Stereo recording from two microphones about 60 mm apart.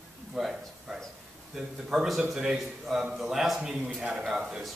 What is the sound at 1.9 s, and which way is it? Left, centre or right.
A man's voice, centre.